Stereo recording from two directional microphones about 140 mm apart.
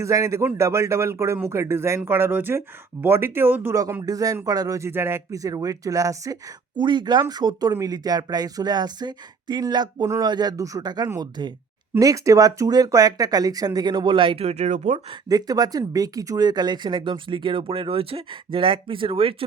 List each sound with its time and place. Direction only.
0.0 s speech: 25° right (ahead or behind); by 15.0 s 55° right (ahead or behind)
15.3 s speech: 25° right (ahead or behind)